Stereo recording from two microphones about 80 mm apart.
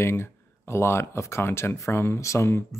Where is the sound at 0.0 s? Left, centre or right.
Left.